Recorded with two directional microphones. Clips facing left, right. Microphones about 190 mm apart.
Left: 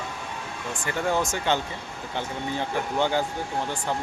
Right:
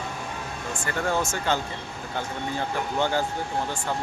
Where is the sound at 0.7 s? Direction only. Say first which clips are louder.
Left 1 dB; 15° left (ahead or behind).